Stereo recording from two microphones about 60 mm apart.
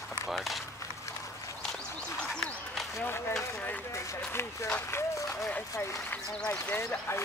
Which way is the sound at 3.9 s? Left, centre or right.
Left.